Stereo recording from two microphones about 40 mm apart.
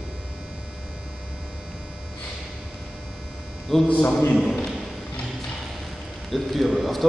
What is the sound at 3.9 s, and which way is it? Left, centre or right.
Speech, left.